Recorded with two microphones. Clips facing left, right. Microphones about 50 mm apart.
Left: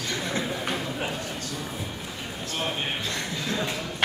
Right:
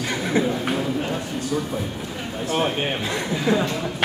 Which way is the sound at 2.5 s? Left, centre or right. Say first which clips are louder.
Right 7 dB; right.